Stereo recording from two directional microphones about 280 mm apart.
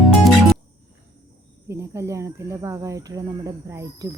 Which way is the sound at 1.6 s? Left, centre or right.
Centre.